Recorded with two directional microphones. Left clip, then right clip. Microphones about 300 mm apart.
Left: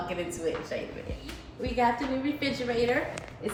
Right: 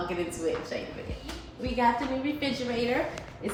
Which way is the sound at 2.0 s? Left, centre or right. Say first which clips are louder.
Even; centre.